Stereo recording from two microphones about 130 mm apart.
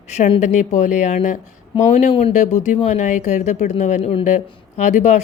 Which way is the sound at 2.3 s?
65° left (ahead or behind).